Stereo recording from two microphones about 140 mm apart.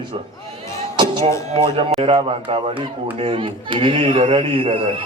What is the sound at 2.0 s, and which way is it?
A child's voice, 40° right (ahead or behind).